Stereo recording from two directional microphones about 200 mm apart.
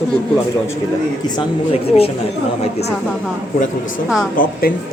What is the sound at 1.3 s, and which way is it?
Speech, 30° left (ahead or behind).